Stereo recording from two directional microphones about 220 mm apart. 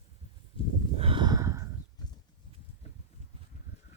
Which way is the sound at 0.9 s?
25° right (ahead or behind).